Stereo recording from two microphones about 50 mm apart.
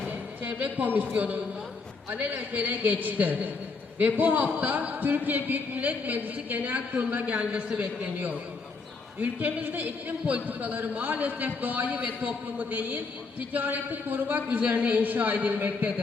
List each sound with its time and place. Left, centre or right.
0.1 s a man's voice: right